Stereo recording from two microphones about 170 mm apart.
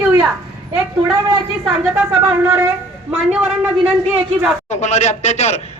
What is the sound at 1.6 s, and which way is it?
Speech, 5° right (ahead or behind).